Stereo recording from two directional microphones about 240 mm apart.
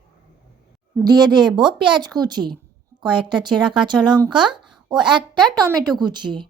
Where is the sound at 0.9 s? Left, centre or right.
Centre.